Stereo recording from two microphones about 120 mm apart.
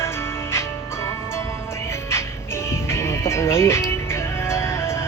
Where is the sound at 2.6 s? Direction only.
20° left (ahead or behind).